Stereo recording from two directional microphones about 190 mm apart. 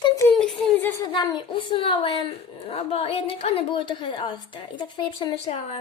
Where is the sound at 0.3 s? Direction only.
5° left (ahead or behind).